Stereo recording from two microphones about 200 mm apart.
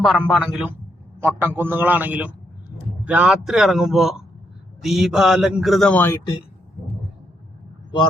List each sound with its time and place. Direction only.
0.0 s a man's voice: centre (ahead or behind)